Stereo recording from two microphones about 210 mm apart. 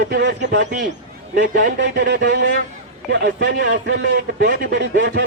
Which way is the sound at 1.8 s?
50° right (ahead or behind).